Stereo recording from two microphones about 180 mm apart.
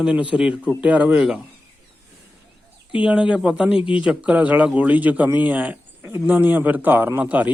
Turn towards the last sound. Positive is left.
turn(degrees=-10)  # may be behind; listen again after turning